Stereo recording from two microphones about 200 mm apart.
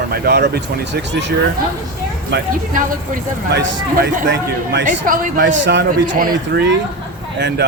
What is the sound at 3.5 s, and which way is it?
A man's voice, 60° right (ahead or behind).